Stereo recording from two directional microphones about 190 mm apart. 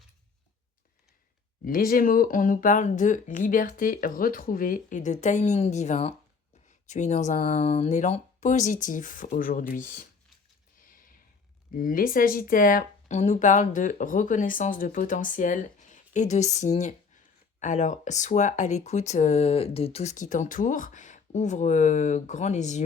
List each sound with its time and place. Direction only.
1.6 s speech: 50° left (ahead or behind)
11.7 s speech: 50° left (ahead or behind)